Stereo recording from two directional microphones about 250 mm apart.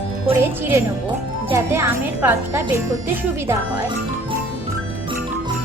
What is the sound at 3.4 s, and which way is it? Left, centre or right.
Speech, centre.